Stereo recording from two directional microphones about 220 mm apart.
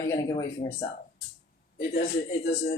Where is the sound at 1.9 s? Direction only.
40° left (ahead or behind).